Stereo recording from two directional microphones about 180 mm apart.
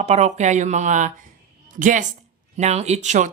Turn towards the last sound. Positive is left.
turn(degrees=-40)  # may be behind; listen again after turning